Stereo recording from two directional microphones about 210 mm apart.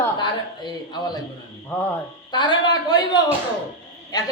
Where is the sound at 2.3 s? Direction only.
20° left (ahead or behind).